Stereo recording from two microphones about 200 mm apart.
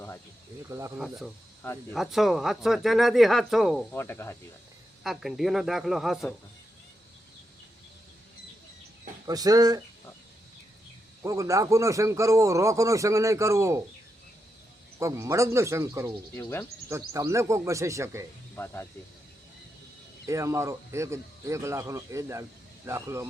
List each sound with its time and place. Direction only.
0.7 s speech: 15° right (ahead or behind)
0.9 s speech: centre (ahead or behind)
1.6 s speech: 10° left (ahead or behind)
2.0 s speech: centre (ahead or behind)
3.9 s speech: 10° left (ahead or behind)
5.0 s speech: centre (ahead or behind)
9.2 s speech: 20° right (ahead or behind)
11.2 s speech: 15° right (ahead or behind)
14.9 s speech: 15° right (ahead or behind)
16.3 s speech: 10° left (ahead or behind)
16.9 s speech: 15° right (ahead or behind)
18.5 s speech: 10° left (ahead or behind)
20.2 s speech: 15° right (ahead or behind)